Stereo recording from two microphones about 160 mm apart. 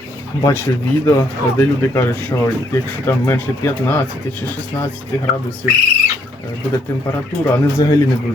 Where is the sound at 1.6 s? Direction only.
15° left (ahead or behind).